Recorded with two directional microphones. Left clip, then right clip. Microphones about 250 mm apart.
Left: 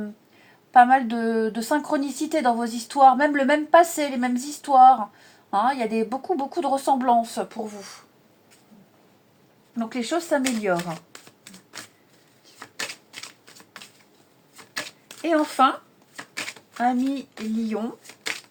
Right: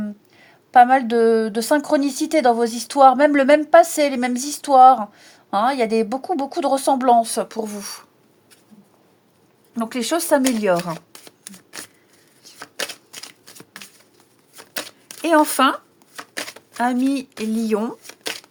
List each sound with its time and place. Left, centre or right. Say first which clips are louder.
0.7 s a woman's voice: right 3 dB; right
9.7 s speech: right 4 dB; right
11.1 s shuffling cards: right 3 dB; right
12.7 s a sound: right 4 dB; right
15.2 s speech: right 4 dB; right
16.7 s speech: right 3 dB; right